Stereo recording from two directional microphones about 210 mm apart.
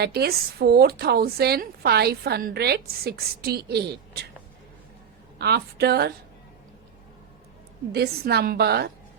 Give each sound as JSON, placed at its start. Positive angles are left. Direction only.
{"t": 0.0, "sound": "a woman's voice", "side_deg": -50}
{"t": 5.4, "sound": "a woman's voice", "side_deg": -50}
{"t": 7.9, "sound": "a woman's voice", "side_deg": -50}